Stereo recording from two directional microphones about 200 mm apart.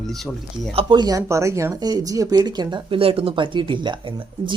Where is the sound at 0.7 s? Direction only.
25° right (ahead or behind).